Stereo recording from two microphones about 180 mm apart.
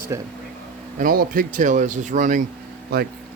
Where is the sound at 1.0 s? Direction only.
50° right (ahead or behind).